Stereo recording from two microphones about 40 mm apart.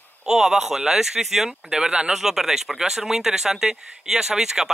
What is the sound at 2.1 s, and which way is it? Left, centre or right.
Speech, centre.